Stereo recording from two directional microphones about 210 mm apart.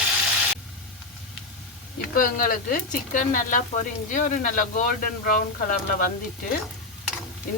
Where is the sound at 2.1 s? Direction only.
40° left (ahead or behind).